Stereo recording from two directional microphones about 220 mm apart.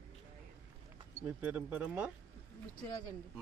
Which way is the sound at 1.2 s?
5° right (ahead or behind).